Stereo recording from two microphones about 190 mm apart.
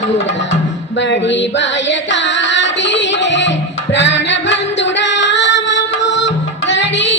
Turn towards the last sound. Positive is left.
turn(degrees=70)  # may be behind; listen again after turning